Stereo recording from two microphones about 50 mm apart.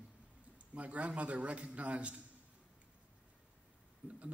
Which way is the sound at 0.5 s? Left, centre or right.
Right.